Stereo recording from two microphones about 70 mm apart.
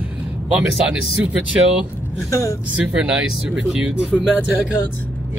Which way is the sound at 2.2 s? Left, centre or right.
Left.